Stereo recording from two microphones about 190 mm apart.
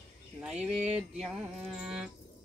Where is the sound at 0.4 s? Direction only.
5° right (ahead or behind).